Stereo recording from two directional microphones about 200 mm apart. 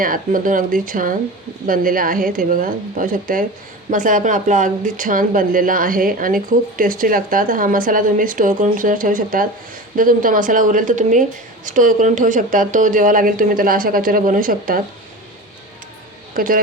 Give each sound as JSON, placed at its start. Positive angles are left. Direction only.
{"t": 0.0, "sound": "speech", "side_deg": -45}
{"t": 16.3, "sound": "speech", "side_deg": -45}